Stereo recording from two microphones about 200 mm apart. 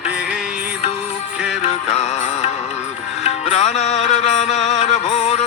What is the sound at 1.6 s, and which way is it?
Music, 30° left (ahead or behind).